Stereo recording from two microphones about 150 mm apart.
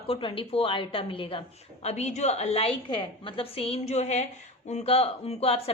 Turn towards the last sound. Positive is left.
turn(degrees=40)  # may be behind; listen again after turning